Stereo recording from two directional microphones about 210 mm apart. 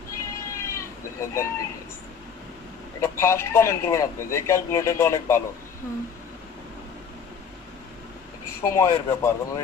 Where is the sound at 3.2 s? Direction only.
10° left (ahead or behind).